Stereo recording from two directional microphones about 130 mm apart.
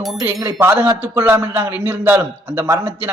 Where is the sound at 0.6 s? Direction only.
15° right (ahead or behind).